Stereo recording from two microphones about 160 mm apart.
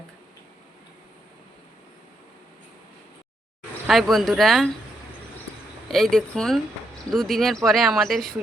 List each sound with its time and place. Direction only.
3.8 s speech: centre (ahead or behind)
5.9 s speech: 5° left (ahead or behind)